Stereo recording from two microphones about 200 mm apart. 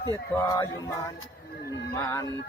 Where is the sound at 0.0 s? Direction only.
20° left (ahead or behind).